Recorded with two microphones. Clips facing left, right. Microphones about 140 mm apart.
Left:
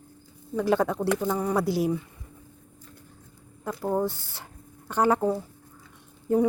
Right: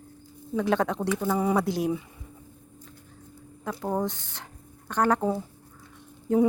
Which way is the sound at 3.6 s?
Centre (ahead or behind).